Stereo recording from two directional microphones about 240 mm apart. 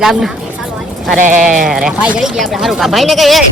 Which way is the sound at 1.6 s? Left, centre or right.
Centre.